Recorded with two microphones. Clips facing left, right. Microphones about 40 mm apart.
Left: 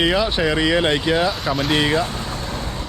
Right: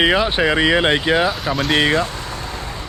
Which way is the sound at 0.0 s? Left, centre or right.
Right.